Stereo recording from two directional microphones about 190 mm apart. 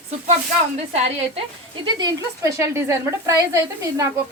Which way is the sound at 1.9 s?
20° right (ahead or behind).